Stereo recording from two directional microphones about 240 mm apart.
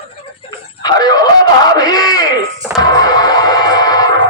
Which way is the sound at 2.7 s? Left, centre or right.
Centre.